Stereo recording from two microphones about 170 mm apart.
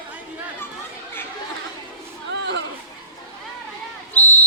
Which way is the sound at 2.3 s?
90° right.